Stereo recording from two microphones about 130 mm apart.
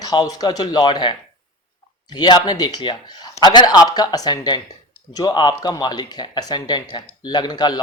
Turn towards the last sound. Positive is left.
turn(degrees=30)  # may be behind; listen again after turning